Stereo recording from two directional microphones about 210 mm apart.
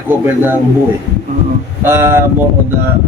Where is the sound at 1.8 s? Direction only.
10° right (ahead or behind).